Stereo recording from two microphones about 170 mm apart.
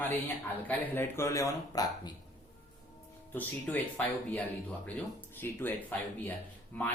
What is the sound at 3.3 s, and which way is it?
Speech, 10° left (ahead or behind).